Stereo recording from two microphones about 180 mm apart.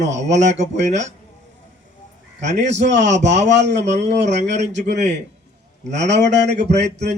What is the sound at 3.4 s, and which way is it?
Speech, 75° right (ahead or behind).